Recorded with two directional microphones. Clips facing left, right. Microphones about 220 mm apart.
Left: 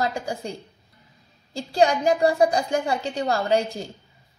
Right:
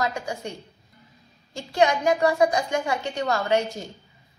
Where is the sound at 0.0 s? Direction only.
30° left (ahead or behind).